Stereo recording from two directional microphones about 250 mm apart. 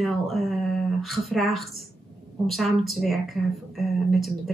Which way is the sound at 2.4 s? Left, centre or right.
Centre.